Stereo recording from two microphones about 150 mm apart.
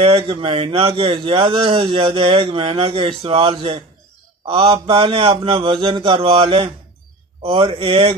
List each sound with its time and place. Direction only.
0.0 s a man's voice: 40° right (ahead or behind)